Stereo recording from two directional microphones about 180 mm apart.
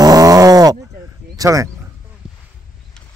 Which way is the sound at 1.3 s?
20° right (ahead or behind).